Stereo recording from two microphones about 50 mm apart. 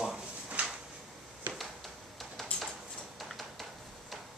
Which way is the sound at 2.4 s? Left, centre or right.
Centre.